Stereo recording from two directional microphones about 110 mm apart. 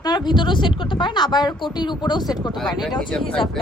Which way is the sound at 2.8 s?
5° left (ahead or behind).